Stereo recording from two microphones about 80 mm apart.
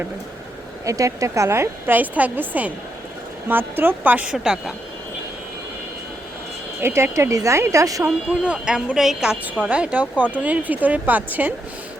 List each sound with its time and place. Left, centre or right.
0.9 s a woman's voice: right; by 4.7 s centre
6.8 s speech: right
8.3 s a woman's voice: centre